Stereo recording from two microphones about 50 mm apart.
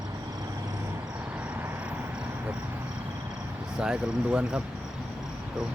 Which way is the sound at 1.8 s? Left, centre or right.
Right.